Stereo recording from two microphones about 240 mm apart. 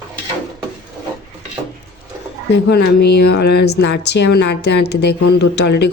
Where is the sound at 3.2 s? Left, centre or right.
Left.